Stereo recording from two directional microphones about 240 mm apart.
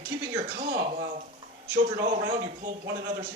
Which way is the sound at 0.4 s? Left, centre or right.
Right.